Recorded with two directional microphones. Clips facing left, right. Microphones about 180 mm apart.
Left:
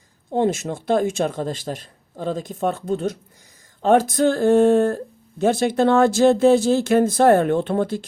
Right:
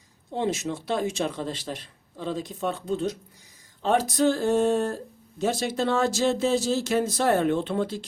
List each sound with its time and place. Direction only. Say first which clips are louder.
0.3 s speech: left 6 dB; 50° left (ahead or behind)